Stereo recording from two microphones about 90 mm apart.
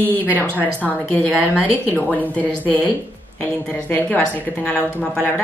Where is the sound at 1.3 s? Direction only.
10° right (ahead or behind).